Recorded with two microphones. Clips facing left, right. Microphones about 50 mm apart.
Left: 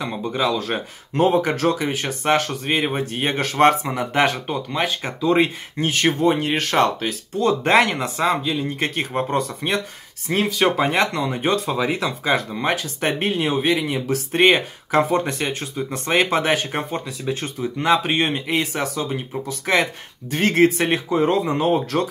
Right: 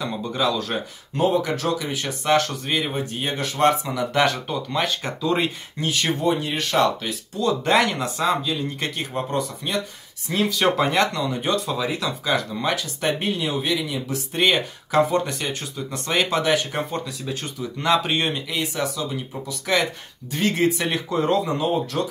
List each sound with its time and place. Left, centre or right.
0.0 s speech: left
1.1 s speech: left
5.8 s speech: left
10.5 s speech: centre
10.9 s speech: left
17.7 s speech: left
21.5 s speech: left